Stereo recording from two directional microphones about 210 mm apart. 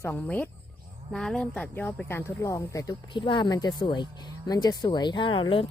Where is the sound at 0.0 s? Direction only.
5° left (ahead or behind).